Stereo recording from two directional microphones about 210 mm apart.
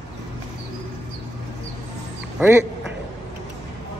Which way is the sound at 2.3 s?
10° right (ahead or behind).